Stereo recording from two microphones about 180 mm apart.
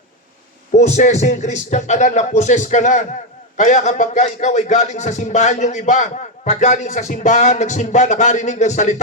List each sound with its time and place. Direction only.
0.8 s speech: 40° left (ahead or behind)